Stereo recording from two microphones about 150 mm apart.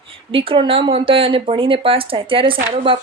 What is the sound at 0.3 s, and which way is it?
Speech, 35° right (ahead or behind).